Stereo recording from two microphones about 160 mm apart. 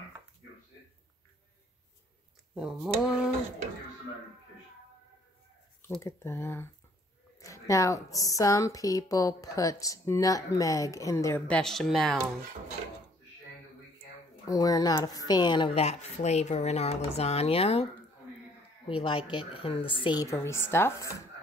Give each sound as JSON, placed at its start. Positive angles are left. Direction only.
{"t": 2.5, "sound": "speech", "side_deg": -5}
{"t": 5.9, "sound": "speech", "side_deg": 15}
{"t": 11.4, "sound": "speech", "side_deg": 5}
{"t": 14.4, "sound": "speech", "side_deg": 20}
{"t": 18.9, "sound": "speech", "side_deg": 35}